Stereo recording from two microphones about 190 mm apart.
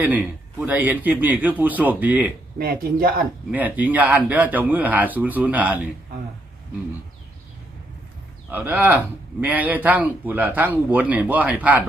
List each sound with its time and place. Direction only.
0.6 s speech: 10° right (ahead or behind)
2.6 s speech: 50° right (ahead or behind)
3.5 s speech: 10° right (ahead or behind)
8.4 s speech: 10° right (ahead or behind)